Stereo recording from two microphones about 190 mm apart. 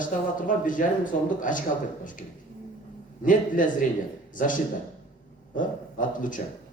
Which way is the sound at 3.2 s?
45° left (ahead or behind).